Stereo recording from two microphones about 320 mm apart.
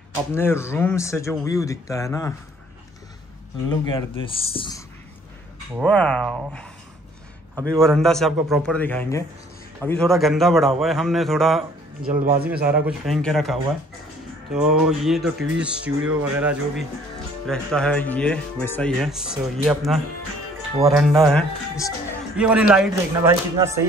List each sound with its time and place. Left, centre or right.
0.3 s speech: centre
3.6 s speech: centre
5.8 s speech: centre
7.5 s a man's voice: centre
7.8 s speech: centre
12.1 s speech: right
12.6 s speech: centre